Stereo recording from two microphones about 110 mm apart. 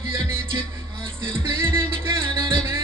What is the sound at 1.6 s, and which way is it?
Music, 25° right (ahead or behind).